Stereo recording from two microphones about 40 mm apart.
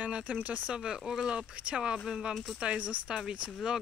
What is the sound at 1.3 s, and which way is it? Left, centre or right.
Speech, right.